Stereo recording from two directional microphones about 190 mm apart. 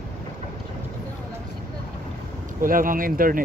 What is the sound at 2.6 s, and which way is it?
Speech, 45° right (ahead or behind).